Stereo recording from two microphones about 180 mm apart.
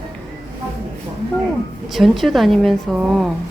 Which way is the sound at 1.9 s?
Centre (ahead or behind).